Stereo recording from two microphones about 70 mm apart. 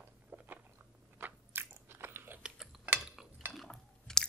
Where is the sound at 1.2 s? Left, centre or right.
Right.